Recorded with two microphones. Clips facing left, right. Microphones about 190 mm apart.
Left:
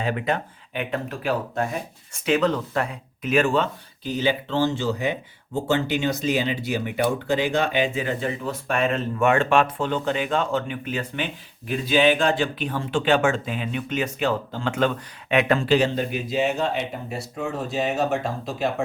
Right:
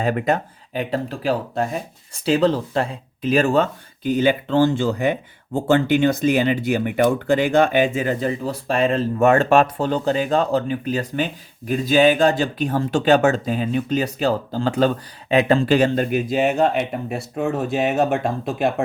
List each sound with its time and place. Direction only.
0.0 s speech: 45° right (ahead or behind)
15.6 s speech: 50° right (ahead or behind)